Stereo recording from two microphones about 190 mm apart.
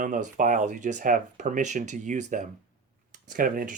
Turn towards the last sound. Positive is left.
turn(degrees=-45)  # may be behind; listen again after turning